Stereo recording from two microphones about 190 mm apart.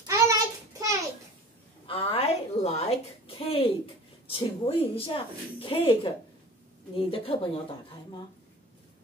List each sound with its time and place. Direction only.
0.0 s child singing: 15° right (ahead or behind)
1.9 s a sound: 30° left (ahead or behind)
4.3 s speech: 30° left (ahead or behind)